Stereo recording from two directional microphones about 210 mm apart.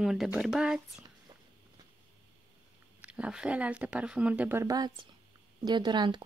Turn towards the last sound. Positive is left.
turn(degrees=-20)  # may be behind; listen again after turning